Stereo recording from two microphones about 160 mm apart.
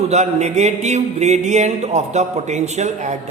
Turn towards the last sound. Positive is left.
turn(degrees=-45)  # may be behind; listen again after turning